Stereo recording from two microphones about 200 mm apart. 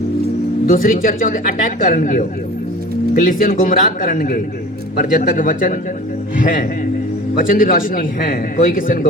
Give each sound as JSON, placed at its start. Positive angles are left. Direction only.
{"t": 0.7, "sound": "speech", "side_deg": 45}